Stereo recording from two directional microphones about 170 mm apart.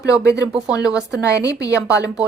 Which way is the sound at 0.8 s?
5° right (ahead or behind).